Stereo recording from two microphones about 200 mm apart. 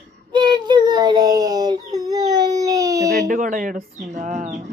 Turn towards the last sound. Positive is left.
turn(degrees=-35)  # may be behind; listen again after turning